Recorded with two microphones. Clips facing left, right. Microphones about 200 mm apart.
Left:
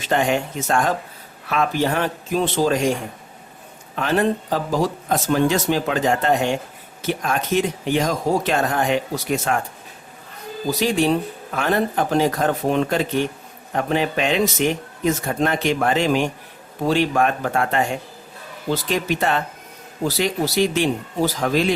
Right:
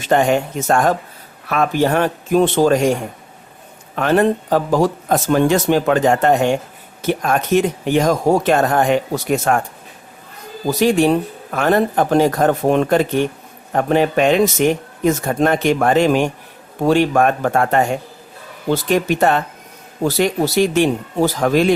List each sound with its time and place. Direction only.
0.0 s speech: 50° right (ahead or behind)
3.9 s speech: 55° right (ahead or behind)
10.7 s speech: 55° right (ahead or behind)